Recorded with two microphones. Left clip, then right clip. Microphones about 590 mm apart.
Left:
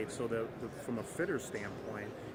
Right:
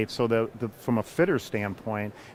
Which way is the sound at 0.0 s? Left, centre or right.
Right.